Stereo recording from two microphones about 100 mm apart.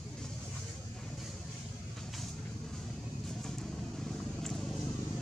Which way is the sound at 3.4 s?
5° left (ahead or behind).